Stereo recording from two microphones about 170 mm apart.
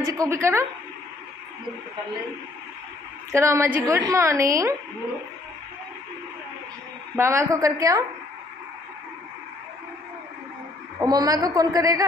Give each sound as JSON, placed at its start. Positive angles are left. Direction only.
{"t": 0.0, "sound": "a woman's voice", "side_deg": -15}
{"t": 3.3, "sound": "a woman's voice", "side_deg": -15}
{"t": 7.2, "sound": "a woman's voice", "side_deg": -15}
{"t": 11.0, "sound": "a woman's voice", "side_deg": -20}